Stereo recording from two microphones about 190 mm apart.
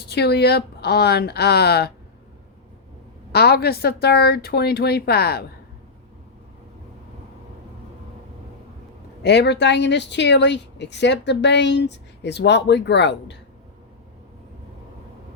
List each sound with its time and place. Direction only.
0.1 s speech: 60° left (ahead or behind)
3.3 s speech: 55° left (ahead or behind)
9.2 s speech: 65° left (ahead or behind)